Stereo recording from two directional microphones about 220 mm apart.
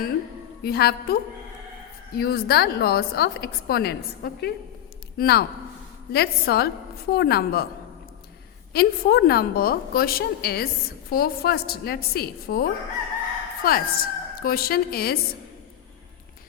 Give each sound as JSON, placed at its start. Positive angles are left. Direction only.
{"t": 0.6, "sound": "a woman's voice", "side_deg": 45}
{"t": 8.7, "sound": "a woman's voice", "side_deg": 45}